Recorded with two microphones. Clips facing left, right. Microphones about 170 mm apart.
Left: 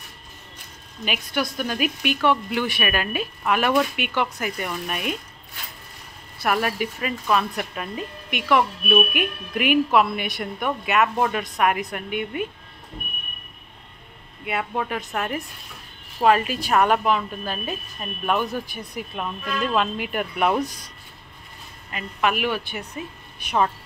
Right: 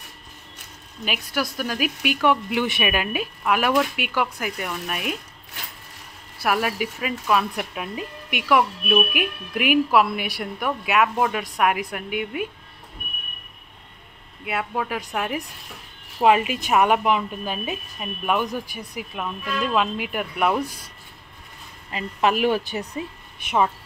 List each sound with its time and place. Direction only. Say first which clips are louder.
1.0 s speech: left 1 dB; 5° right (ahead or behind)
6.4 s speech: even; 5° right (ahead or behind)
14.4 s a woman's voice: even; centre (ahead or behind)
21.9 s speech: right 2 dB; 30° right (ahead or behind)